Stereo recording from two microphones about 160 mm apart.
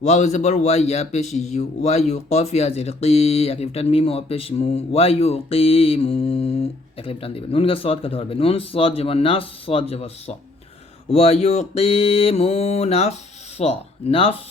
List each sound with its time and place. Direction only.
0.0 s speech: 45° left (ahead or behind)